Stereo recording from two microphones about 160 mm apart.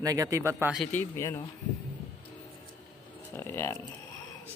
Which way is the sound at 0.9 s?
15° left (ahead or behind).